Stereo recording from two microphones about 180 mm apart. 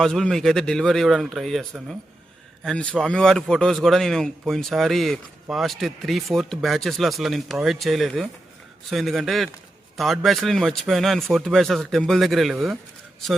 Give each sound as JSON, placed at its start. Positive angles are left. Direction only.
{"t": 0.0, "sound": "a man's voice", "side_deg": 0}